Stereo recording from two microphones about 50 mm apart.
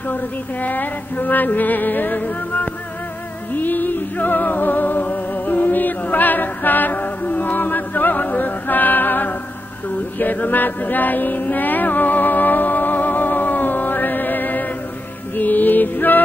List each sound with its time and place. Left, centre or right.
0.1 s music: left
9.8 s a sound: left
15.3 s music: left